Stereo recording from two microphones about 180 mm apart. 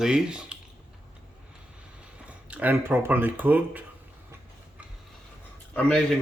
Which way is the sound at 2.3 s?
10° right (ahead or behind).